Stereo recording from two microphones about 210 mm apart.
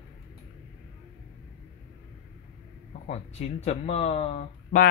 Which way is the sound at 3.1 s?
30° left (ahead or behind).